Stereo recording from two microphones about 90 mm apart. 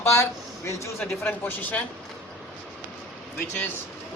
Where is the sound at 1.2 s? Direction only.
20° left (ahead or behind).